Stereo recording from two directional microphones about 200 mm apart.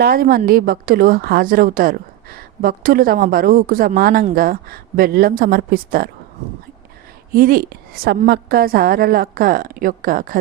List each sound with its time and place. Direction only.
0.0 s a woman's voice: 50° right (ahead or behind)
7.3 s a woman's voice: 45° right (ahead or behind)